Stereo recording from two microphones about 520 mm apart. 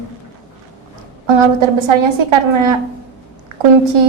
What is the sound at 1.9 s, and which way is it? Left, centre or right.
Speech, right.